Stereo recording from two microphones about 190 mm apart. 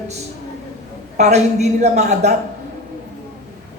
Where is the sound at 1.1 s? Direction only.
35° right (ahead or behind).